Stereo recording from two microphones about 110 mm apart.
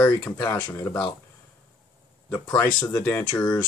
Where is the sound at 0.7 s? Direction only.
30° left (ahead or behind).